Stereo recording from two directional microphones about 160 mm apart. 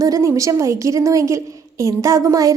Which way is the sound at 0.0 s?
20° right (ahead or behind).